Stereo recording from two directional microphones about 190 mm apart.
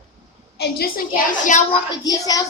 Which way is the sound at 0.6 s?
55° left (ahead or behind).